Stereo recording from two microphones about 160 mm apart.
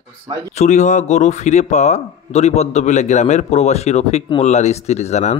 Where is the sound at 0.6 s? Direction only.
50° left (ahead or behind).